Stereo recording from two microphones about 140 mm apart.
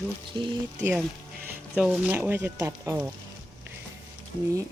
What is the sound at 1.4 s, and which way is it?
Speech, 10° right (ahead or behind).